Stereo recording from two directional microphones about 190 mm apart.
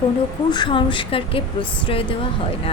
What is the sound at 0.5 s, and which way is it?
A woman's voice, 25° left (ahead or behind).